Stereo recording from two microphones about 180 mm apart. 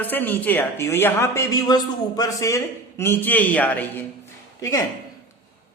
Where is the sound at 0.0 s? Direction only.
10° left (ahead or behind).